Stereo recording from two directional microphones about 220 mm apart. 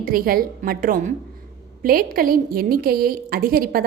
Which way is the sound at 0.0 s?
40° right (ahead or behind).